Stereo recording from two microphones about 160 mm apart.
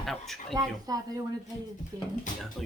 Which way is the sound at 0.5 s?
25° right (ahead or behind).